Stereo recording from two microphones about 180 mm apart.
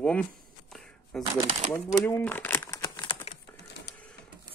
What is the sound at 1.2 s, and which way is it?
Speech, 35° right (ahead or behind).